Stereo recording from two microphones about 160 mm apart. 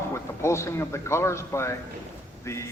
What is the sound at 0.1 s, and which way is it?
Speech, 15° left (ahead or behind).